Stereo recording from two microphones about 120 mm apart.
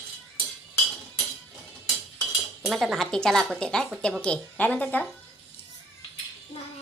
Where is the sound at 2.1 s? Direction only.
Centre (ahead or behind).